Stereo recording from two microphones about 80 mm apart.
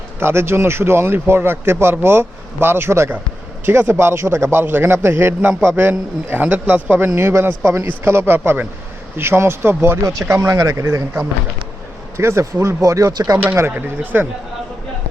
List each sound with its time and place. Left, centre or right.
0.2 s a man's voice: right
7.1 s a man's voice: right
13.7 s a man's voice: right